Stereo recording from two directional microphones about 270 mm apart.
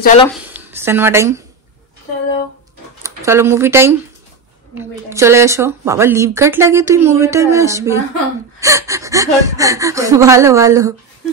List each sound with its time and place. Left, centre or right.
0.0 s speech: left
0.5 s a sound: centre
3.0 s speech: centre